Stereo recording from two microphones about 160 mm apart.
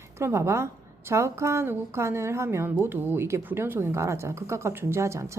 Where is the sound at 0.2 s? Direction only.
15° right (ahead or behind).